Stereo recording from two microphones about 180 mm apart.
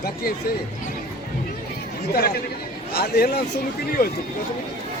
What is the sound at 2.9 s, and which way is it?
Speech, 60° left (ahead or behind).